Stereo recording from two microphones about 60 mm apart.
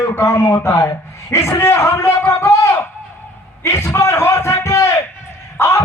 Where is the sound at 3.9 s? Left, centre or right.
Left.